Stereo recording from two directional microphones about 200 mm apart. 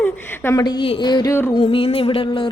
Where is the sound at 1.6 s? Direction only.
30° left (ahead or behind).